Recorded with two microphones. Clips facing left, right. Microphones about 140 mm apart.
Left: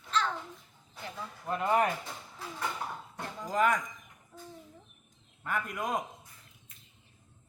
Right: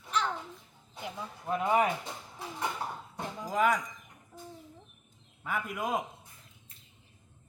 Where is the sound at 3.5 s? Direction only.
Centre (ahead or behind).